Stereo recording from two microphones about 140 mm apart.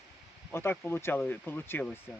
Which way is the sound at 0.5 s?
15° left (ahead or behind).